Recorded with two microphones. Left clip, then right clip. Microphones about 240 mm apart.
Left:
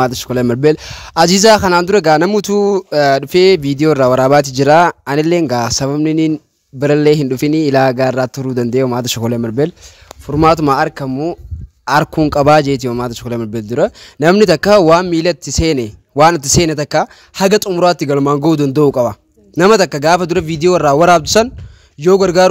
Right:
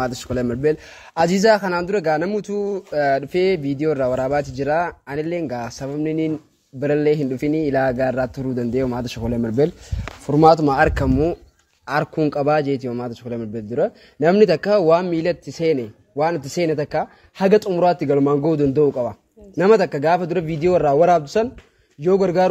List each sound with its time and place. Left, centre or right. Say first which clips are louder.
0.0 s speech: left 9 dB; left
10.8 s speech: left 1 dB; centre
11.8 s speech: left 8 dB; left